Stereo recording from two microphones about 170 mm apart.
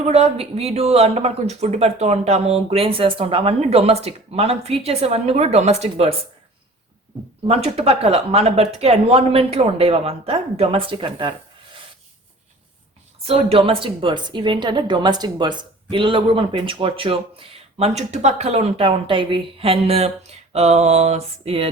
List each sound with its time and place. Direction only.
0.0 s a woman's voice: 35° right (ahead or behind)
7.4 s a woman's voice: 35° right (ahead or behind)
13.2 s a woman's voice: 35° right (ahead or behind)